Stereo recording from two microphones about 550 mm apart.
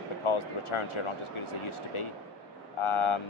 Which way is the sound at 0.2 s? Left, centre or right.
Left.